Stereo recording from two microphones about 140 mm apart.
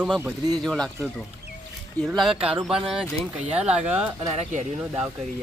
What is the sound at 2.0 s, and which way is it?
Speech, centre (ahead or behind).